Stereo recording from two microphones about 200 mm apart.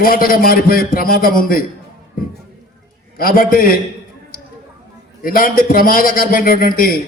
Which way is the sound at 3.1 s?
45° left (ahead or behind).